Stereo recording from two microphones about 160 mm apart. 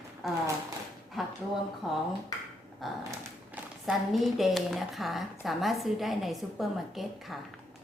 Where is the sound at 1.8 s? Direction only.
Centre (ahead or behind).